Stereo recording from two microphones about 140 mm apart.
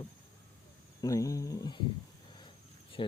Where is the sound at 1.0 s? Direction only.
25° left (ahead or behind).